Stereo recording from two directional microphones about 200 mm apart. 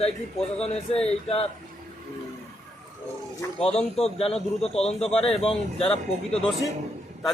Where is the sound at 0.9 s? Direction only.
30° left (ahead or behind).